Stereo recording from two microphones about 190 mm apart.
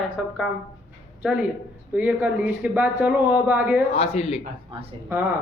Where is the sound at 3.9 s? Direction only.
30° left (ahead or behind).